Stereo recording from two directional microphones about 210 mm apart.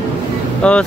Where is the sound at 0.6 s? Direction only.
5° left (ahead or behind).